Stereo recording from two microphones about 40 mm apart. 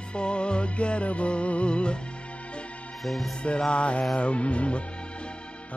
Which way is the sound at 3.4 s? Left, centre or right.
Left.